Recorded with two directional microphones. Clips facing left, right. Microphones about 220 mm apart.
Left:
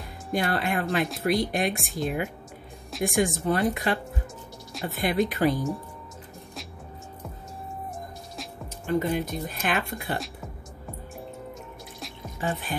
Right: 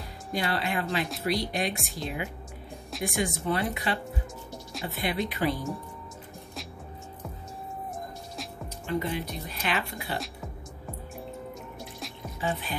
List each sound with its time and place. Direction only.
0.3 s speech: 50° left (ahead or behind)
8.8 s speech: 50° left (ahead or behind)
12.4 s speech: 50° left (ahead or behind)